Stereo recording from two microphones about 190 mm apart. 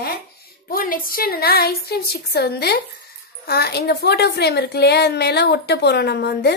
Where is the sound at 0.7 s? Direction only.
50° left (ahead or behind).